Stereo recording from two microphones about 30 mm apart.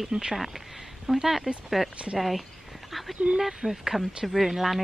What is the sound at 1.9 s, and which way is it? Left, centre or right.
Speech, right.